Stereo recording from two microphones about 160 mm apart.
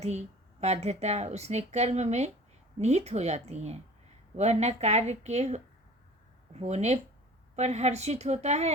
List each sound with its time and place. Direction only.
0.0 s speech: 45° right (ahead or behind)